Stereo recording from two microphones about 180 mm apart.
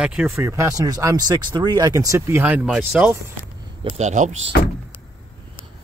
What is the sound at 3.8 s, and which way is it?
Speech, 35° right (ahead or behind).